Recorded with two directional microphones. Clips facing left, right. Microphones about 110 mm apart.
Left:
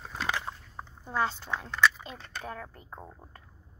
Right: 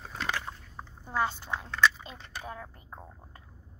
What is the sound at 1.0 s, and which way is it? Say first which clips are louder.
A woman's voice: even; 10° right (ahead or behind).